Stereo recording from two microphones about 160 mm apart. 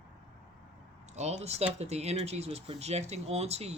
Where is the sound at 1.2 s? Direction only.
45° right (ahead or behind).